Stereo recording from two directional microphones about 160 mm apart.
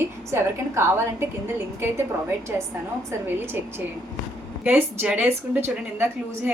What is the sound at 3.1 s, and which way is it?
Speech, 15° right (ahead or behind).